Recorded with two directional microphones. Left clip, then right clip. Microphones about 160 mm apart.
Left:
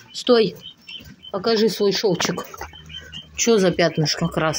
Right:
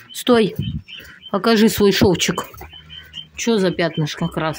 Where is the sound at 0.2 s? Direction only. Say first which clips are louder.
Right 1 dB; 50° right (ahead or behind).